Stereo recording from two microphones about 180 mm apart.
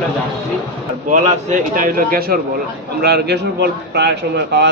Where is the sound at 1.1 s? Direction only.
40° right (ahead or behind).